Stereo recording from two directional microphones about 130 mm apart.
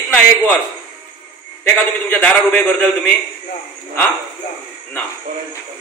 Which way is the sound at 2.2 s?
10° left (ahead or behind).